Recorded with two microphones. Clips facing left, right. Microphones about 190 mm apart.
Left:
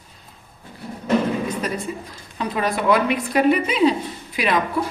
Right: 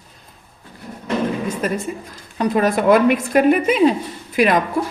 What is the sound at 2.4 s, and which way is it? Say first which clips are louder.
Speech: right 6 dB; 45° right (ahead or behind).